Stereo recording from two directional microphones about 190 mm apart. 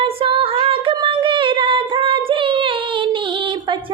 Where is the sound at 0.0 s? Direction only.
30° right (ahead or behind).